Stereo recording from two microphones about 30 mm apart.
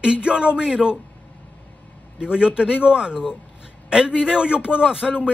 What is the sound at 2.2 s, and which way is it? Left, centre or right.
Speech, right.